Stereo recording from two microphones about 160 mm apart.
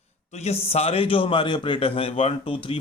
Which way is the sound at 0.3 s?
45° left (ahead or behind).